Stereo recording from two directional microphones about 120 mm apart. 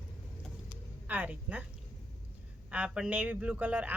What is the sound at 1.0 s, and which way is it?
Speech, 15° right (ahead or behind).